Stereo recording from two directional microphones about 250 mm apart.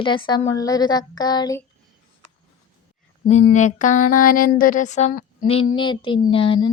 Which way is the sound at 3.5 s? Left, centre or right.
Left.